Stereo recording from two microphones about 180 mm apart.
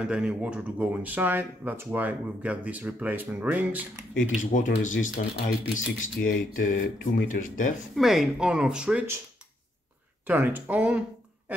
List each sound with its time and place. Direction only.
0.0 s speech: 5° right (ahead or behind)
4.3 s speech: 45° left (ahead or behind)
7.9 s speech: centre (ahead or behind)
10.2 s speech: 10° right (ahead or behind)